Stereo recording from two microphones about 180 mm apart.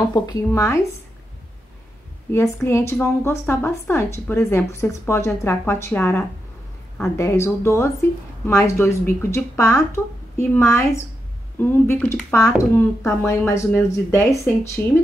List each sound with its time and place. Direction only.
0.1 s speech: 20° left (ahead or behind)
2.3 s speech: 15° left (ahead or behind)